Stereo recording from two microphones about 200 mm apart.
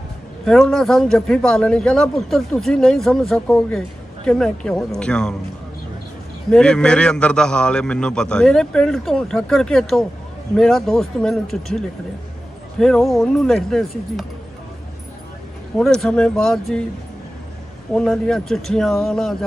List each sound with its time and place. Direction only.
0.5 s a man's voice: centre (ahead or behind)
6.5 s a man's voice: 5° left (ahead or behind)
15.8 s a man's voice: 5° left (ahead or behind)
17.9 s a man's voice: 5° left (ahead or behind)